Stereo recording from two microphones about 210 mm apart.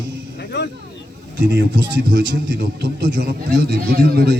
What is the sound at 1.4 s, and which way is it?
A man's voice, 55° right (ahead or behind).